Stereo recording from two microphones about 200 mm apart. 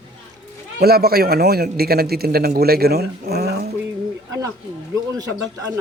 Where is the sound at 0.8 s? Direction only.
50° right (ahead or behind).